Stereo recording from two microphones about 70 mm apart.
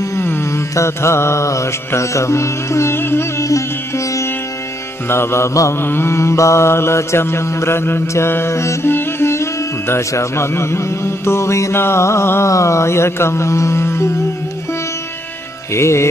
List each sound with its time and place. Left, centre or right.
0.0 s mantra: left
5.8 s mantra: left
15.7 s music: left